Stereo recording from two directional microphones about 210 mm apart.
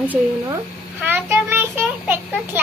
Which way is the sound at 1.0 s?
10° right (ahead or behind).